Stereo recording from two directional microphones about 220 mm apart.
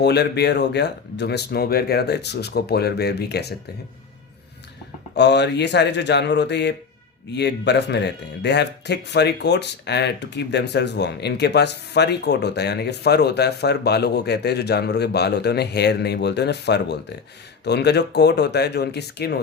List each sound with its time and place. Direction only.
0.0 s speech: 50° left (ahead or behind)
5.1 s speech: 50° left (ahead or behind)